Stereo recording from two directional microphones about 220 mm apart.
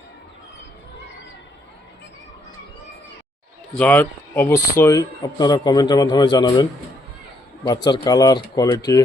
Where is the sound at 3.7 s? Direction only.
5° left (ahead or behind).